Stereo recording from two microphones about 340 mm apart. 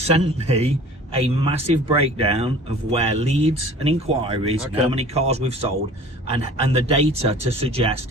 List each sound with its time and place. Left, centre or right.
0.0 s speech: centre